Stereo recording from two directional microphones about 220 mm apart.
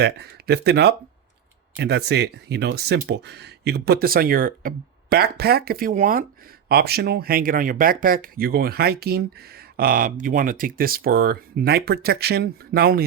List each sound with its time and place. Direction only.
0.0 s speech: 50° right (ahead or behind)